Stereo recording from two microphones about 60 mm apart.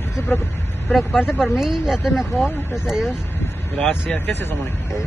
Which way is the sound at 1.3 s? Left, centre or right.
Centre.